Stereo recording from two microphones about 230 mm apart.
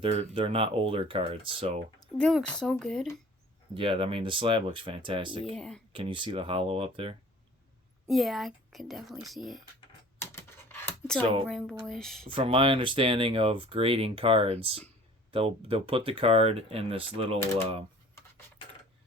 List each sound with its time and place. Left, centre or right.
0.0 s speech: right
2.1 s a woman's voice: centre
3.8 s speech: right
5.5 s a woman's voice: centre
5.9 s speech: right
8.0 s a woman's voice: centre
10.2 s computer keyboard: centre
11.4 s a woman's voice: centre
12.3 s speech: right